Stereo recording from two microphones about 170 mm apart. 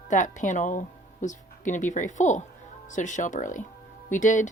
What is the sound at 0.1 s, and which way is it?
Speech, 50° left (ahead or behind).